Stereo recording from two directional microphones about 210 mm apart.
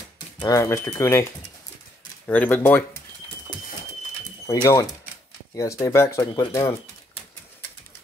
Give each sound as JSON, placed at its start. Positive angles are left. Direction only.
{"t": 0.4, "sound": "speech", "side_deg": 15}
{"t": 2.2, "sound": "speech", "side_deg": 10}
{"t": 4.5, "sound": "speech", "side_deg": 15}